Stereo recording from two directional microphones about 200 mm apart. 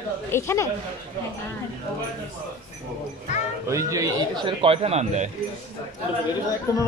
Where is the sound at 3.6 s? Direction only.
15° right (ahead or behind); by 5.3 s 35° right (ahead or behind).